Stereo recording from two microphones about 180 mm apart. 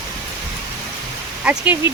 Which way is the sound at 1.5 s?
10° right (ahead or behind).